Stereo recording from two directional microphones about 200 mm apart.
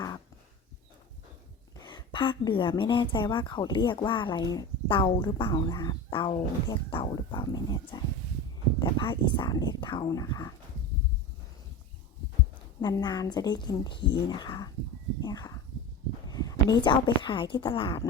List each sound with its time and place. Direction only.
1.8 s a woman's voice: 20° left (ahead or behind)
12.8 s a woman's voice: 20° left (ahead or behind)